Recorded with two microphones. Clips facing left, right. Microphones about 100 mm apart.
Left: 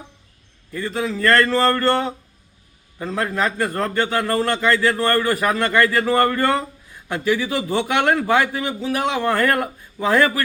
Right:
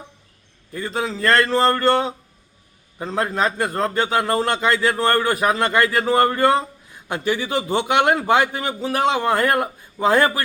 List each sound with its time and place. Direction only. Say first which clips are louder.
0.7 s a man's voice: left 1 dB; 30° right (ahead or behind)
8.8 s a man's voice: right 2 dB; 35° right (ahead or behind)
9.2 s a man's voice: even; 20° right (ahead or behind)